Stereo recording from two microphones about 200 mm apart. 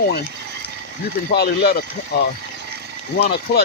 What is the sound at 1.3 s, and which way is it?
Speech, 50° left (ahead or behind).